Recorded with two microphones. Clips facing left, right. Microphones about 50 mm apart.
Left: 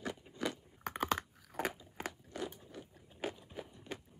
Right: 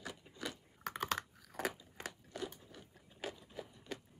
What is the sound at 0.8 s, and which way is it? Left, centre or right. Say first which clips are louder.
Chewing: left 3 dB; centre.